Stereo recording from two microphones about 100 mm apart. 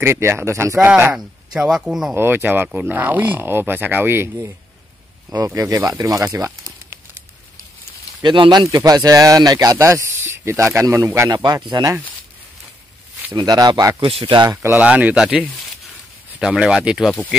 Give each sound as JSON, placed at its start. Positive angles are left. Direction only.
{"t": 0.0, "sound": "speech", "side_deg": -25}
{"t": 1.1, "sound": "speech", "side_deg": -5}
{"t": 2.1, "sound": "speech", "side_deg": -20}
{"t": 5.4, "sound": "speech", "side_deg": -35}
{"t": 8.2, "sound": "speech", "side_deg": -50}
{"t": 11.2, "sound": "speech", "side_deg": -40}
{"t": 13.3, "sound": "speech", "side_deg": -40}
{"t": 14.0, "sound": "speech", "side_deg": -60}
{"t": 14.5, "sound": "speech", "side_deg": -30}
{"t": 14.8, "sound": "speech", "side_deg": -15}
{"t": 16.3, "sound": "speech", "side_deg": -10}